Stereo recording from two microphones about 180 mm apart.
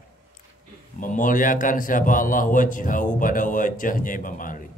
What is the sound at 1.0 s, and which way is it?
Speech, 50° left (ahead or behind).